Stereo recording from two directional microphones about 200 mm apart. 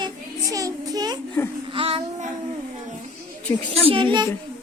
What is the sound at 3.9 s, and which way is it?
Speech, 25° right (ahead or behind).